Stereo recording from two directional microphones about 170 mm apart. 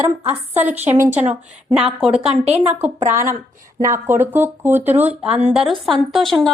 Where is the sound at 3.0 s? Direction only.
45° right (ahead or behind).